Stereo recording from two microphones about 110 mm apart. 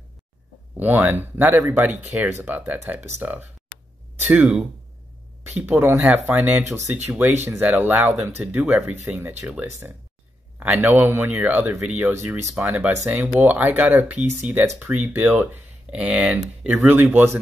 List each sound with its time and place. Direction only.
0.7 s speech: 15° right (ahead or behind)